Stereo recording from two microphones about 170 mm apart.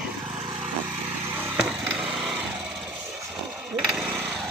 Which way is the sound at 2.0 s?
Centre (ahead or behind).